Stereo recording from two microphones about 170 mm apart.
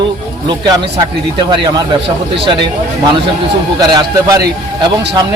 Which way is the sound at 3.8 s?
25° right (ahead or behind).